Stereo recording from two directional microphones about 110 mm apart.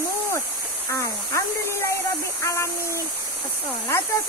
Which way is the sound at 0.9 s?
25° left (ahead or behind).